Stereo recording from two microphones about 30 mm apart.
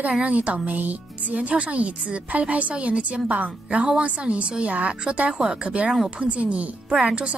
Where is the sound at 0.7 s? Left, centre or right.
Right.